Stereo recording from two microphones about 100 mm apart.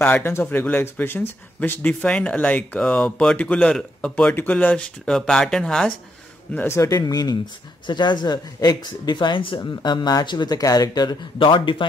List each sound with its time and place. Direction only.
0.0 s speech: 20° left (ahead or behind)
6.5 s speech: 20° left (ahead or behind)
6.8 s speech: 35° left (ahead or behind); by 9.7 s 55° left (ahead or behind)
9.7 s speech: 40° left (ahead or behind)
11.3 s speech: 55° left (ahead or behind)